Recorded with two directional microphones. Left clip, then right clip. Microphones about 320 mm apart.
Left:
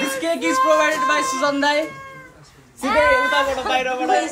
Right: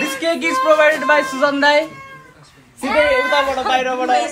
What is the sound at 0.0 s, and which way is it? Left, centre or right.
Speech, right.